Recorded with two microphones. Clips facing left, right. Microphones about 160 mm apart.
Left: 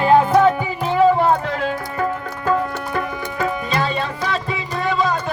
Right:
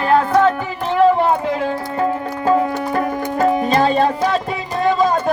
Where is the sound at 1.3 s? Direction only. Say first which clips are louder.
Right 1 dB; 15° right (ahead or behind).